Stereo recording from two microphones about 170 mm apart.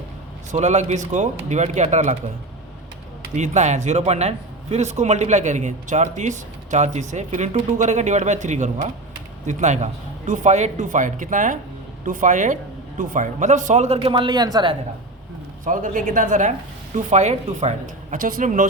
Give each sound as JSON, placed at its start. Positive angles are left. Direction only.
{"t": 0.5, "sound": "a man's voice", "side_deg": -40}
{"t": 3.3, "sound": "a man's voice", "side_deg": -45}
{"t": 15.6, "sound": "a man's voice", "side_deg": -50}